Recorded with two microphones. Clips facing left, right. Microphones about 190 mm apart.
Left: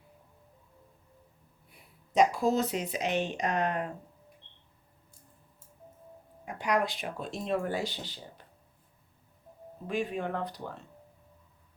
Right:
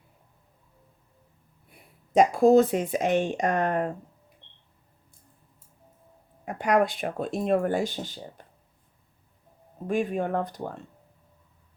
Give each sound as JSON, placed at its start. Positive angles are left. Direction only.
{"t": 1.7, "sound": "speech", "side_deg": -50}
{"t": 6.4, "sound": "speech", "side_deg": -50}
{"t": 9.8, "sound": "speech", "side_deg": -50}